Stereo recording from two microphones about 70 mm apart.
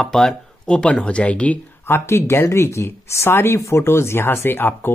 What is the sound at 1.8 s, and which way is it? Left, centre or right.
Speech, left.